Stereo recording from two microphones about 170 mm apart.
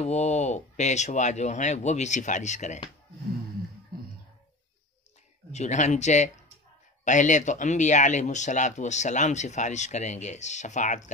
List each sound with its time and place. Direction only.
0.0 s speech: 40° left (ahead or behind)
5.5 s speech: 40° left (ahead or behind)